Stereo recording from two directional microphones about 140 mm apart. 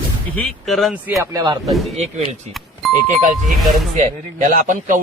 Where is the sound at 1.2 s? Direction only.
25° right (ahead or behind).